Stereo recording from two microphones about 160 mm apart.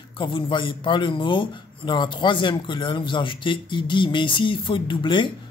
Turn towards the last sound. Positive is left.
turn(degrees=30)  # may be behind; listen again after turning